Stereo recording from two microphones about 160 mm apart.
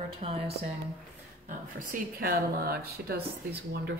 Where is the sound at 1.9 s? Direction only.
70° right (ahead or behind).